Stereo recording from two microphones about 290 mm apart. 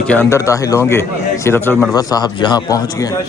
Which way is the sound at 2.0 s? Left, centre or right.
Centre.